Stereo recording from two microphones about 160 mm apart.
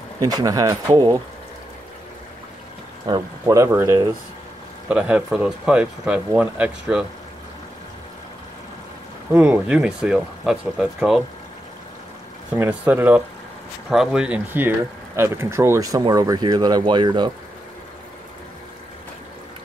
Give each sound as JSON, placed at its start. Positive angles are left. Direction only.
{"t": 0.2, "sound": "speech", "side_deg": -25}
{"t": 3.1, "sound": "speech", "side_deg": -20}
{"t": 9.4, "sound": "speech", "side_deg": -5}
{"t": 12.5, "sound": "speech", "side_deg": -10}